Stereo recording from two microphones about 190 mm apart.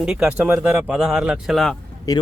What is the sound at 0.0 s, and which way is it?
Speech, 5° right (ahead or behind).